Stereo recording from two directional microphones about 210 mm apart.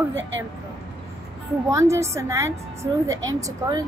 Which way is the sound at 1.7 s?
15° right (ahead or behind).